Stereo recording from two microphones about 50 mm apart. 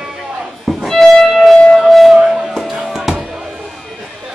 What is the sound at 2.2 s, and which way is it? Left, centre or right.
Music, centre.